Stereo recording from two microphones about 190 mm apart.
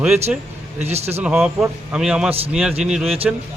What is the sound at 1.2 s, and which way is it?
A man's voice, 5° right (ahead or behind).